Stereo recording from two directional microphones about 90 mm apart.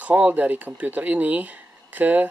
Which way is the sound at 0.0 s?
20° right (ahead or behind).